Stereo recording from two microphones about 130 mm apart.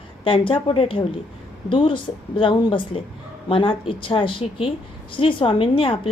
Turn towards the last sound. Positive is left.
turn(degrees=45)  # may be behind; listen again after turning